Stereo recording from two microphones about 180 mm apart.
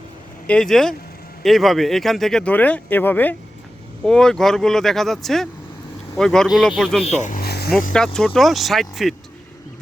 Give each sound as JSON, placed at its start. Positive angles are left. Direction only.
{"t": 0.4, "sound": "speech", "side_deg": 5}
{"t": 7.3, "sound": "vehicle", "side_deg": 55}
{"t": 7.9, "sound": "speech", "side_deg": 5}